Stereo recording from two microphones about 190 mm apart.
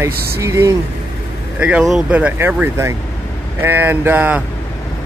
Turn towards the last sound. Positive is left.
turn(degrees=-10)  # may be behind; listen again after turning